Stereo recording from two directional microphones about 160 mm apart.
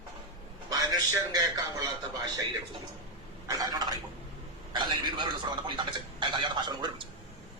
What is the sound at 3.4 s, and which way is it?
A man's voice, 25° right (ahead or behind).